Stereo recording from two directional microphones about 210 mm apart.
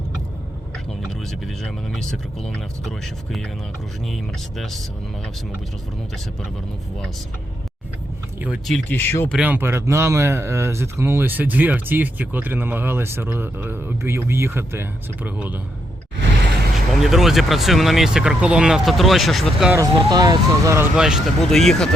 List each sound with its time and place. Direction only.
1.6 s speech: 5° left (ahead or behind)
4.1 s speech: centre (ahead or behind)
8.4 s speech: centre (ahead or behind)
9.3 s speech: 5° right (ahead or behind)
16.7 s speech: centre (ahead or behind)
19.7 s speech: 20° right (ahead or behind)
20.9 s speech: 5° right (ahead or behind)